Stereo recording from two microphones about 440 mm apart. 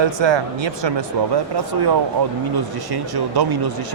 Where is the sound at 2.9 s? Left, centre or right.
Right.